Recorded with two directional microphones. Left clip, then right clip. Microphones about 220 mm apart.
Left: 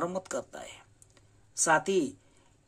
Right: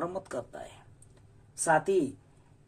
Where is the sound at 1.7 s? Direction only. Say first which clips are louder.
Right 1 dB; 20° left (ahead or behind).